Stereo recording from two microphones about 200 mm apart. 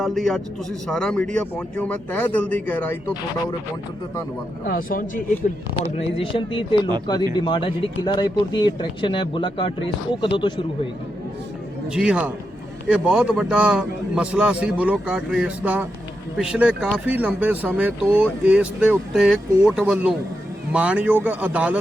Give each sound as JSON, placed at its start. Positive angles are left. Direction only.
{"t": 0.0, "sound": "a man's voice", "side_deg": 0}
{"t": 4.6, "sound": "speech", "side_deg": 45}
{"t": 6.3, "sound": "speech", "side_deg": 25}
{"t": 11.9, "sound": "a man's voice", "side_deg": -5}